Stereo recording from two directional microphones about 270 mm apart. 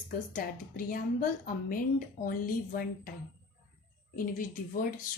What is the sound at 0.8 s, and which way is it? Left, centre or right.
A woman's voice, left.